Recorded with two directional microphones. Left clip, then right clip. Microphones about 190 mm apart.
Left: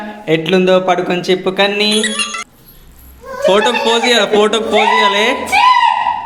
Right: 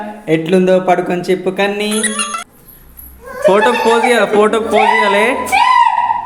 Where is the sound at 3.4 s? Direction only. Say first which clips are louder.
Right 1 dB; 5° left (ahead or behind).